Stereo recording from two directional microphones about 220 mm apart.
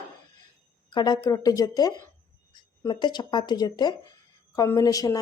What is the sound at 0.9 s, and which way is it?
A woman's voice, 20° left (ahead or behind).